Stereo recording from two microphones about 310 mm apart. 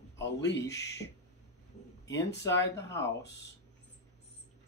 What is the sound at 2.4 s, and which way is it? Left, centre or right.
Speech, left.